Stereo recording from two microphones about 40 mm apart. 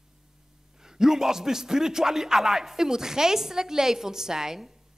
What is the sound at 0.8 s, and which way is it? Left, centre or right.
A man's voice, centre.